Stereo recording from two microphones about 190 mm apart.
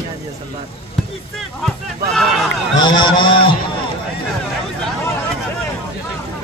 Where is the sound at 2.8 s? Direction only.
25° left (ahead or behind).